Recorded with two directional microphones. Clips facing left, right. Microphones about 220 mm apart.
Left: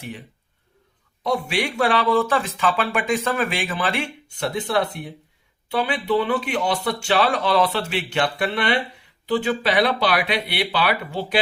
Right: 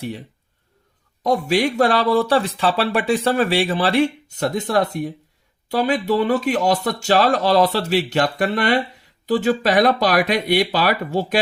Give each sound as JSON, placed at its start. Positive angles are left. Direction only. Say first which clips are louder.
{"t": 1.2, "sound": "speech", "louder": "right 5 dB", "side_deg": -40}